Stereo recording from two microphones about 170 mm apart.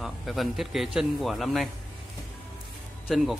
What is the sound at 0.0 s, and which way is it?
Speech, centre (ahead or behind).